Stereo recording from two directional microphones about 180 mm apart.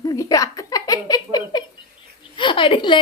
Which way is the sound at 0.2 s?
20° left (ahead or behind).